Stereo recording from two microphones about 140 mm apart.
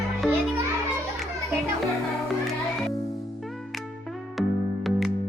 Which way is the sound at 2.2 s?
Centre (ahead or behind).